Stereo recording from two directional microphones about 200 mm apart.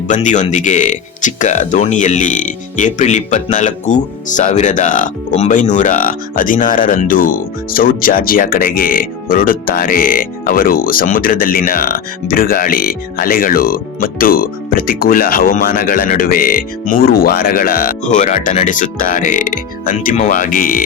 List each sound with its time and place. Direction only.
0.1 s speech: 40° left (ahead or behind)